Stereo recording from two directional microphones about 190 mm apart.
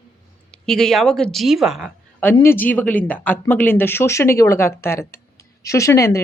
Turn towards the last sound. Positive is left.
turn(degrees=15)  # may be behind; listen again after turning